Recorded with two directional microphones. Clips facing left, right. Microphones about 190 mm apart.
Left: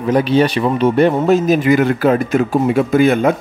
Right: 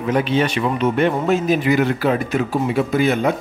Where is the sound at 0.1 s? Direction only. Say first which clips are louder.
Left 5 dB; 35° left (ahead or behind).